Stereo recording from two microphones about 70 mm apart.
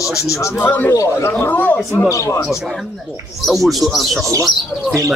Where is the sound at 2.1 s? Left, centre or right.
Left.